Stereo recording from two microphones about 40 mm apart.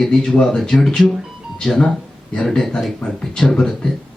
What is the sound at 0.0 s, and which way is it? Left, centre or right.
Speech, centre.